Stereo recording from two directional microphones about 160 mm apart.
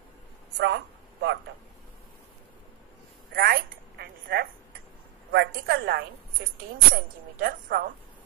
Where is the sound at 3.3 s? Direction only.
70° right (ahead or behind).